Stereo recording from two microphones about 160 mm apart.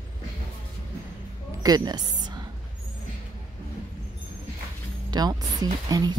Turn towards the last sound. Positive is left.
turn(degrees=-25)  # may be behind; listen again after turning